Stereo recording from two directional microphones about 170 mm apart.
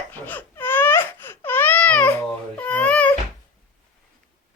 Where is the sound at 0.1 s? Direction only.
10° left (ahead or behind).